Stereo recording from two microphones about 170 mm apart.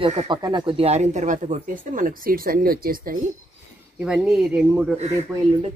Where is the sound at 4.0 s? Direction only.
5° right (ahead or behind).